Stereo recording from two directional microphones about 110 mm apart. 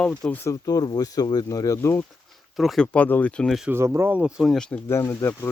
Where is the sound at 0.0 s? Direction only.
10° left (ahead or behind).